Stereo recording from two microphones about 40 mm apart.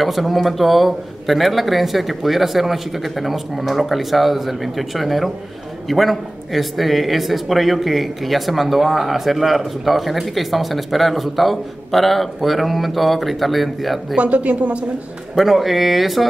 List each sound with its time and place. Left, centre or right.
0.0 s speech: centre
14.1 s speech: right
15.3 s speech: centre